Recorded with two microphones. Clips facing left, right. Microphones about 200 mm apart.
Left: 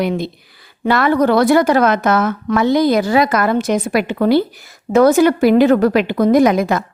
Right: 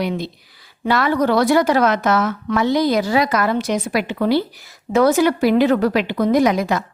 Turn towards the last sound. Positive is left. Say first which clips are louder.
# left 4 dB
turn(degrees=50)  # may be behind; listen again after turning